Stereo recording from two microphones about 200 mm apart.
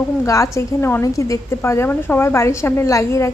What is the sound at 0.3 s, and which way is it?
A woman's voice, 15° left (ahead or behind).